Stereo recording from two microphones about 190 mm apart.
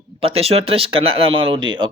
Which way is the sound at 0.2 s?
30° right (ahead or behind).